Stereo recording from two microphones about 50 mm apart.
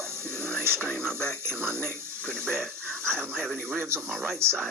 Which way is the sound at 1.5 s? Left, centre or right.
Right.